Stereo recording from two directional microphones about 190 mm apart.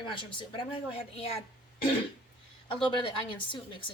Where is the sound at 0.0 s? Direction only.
25° left (ahead or behind).